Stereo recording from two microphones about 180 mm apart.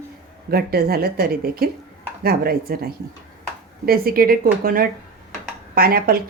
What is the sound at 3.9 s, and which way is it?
Speech, 55° right (ahead or behind).